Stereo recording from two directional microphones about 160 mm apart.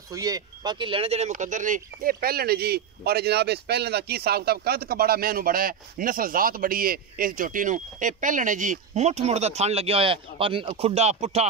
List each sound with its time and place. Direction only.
0.1 s speech: 25° right (ahead or behind); by 11.4 s 40° right (ahead or behind)